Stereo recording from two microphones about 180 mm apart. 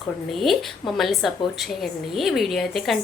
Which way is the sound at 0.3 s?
Centre (ahead or behind).